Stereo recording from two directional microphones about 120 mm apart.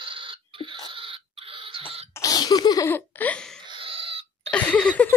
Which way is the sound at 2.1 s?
30° left (ahead or behind).